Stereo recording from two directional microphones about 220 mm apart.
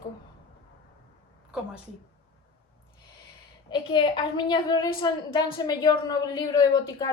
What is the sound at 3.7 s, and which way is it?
A woman's voice, 20° left (ahead or behind).